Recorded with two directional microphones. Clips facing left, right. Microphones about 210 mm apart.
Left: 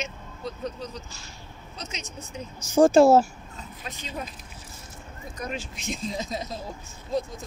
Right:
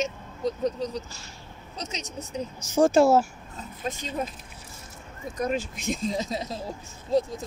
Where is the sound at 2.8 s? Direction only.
30° left (ahead or behind).